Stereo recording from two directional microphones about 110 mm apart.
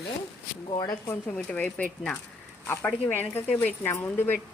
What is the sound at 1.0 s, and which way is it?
Speech, 15° left (ahead or behind).